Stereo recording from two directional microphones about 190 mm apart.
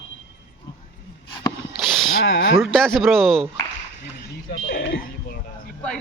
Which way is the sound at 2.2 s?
85° left.